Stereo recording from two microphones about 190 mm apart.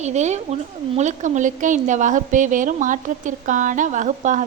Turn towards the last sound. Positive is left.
turn(degrees=-40)  # may be behind; listen again after turning